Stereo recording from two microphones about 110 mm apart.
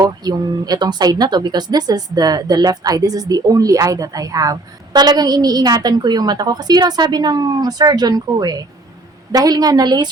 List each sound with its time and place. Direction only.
0.0 s speech: 35° right (ahead or behind)